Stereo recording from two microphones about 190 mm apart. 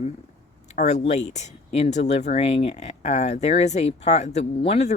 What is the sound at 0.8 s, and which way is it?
Speech, 35° left (ahead or behind).